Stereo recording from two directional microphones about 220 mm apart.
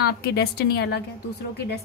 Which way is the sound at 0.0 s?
45° left (ahead or behind).